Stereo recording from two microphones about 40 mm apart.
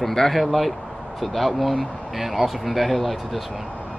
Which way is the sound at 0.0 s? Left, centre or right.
Centre.